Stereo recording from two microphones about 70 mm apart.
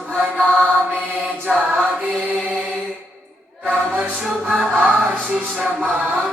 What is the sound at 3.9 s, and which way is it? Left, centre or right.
Music, centre.